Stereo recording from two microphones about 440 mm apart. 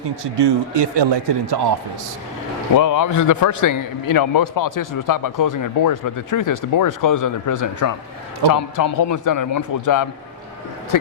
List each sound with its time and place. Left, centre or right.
0.3 s a man's voice: right
2.7 s a man's voice: left